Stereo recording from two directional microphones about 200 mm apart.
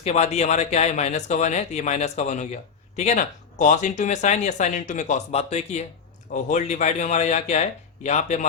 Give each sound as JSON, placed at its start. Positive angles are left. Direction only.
{"t": 0.0, "sound": "speech", "side_deg": 35}